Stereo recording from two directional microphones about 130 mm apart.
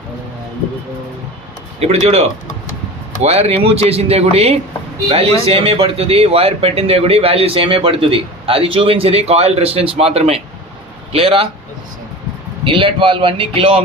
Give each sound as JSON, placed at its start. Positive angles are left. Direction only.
{"t": 1.8, "sound": "speech", "side_deg": -55}
{"t": 12.6, "sound": "speech", "side_deg": -40}